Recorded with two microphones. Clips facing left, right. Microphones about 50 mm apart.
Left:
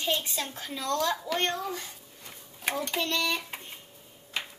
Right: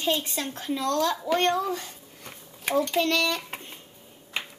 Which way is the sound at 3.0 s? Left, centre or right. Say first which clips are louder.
Right 5 dB; right.